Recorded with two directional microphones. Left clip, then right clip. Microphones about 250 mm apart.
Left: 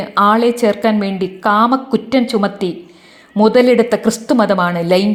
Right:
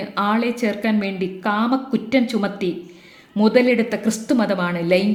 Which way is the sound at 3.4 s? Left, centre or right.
Centre.